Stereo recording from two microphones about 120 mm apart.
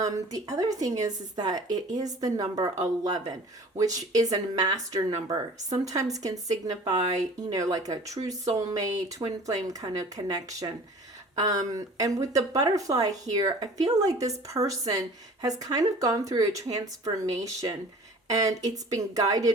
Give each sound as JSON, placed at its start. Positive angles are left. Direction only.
{"t": 0.0, "sound": "a woman's voice", "side_deg": -30}